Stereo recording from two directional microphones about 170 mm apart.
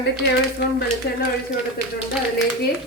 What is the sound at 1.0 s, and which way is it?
Speech, 70° left (ahead or behind).